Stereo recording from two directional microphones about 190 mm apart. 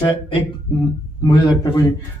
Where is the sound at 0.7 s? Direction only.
25° left (ahead or behind).